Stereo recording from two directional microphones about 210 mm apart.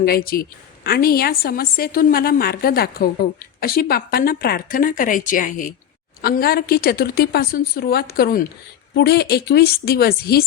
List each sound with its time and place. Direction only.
0.0 s a woman's voice: 45° left (ahead or behind)